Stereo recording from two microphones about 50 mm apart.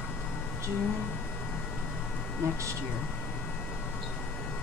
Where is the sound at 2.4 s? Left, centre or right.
Right.